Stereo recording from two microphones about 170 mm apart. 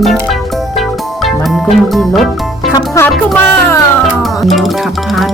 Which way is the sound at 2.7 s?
20° left (ahead or behind).